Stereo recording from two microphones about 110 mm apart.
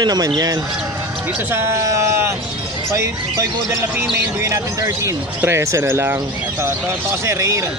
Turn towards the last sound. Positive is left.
turn(degrees=-30)  # may be behind; listen again after turning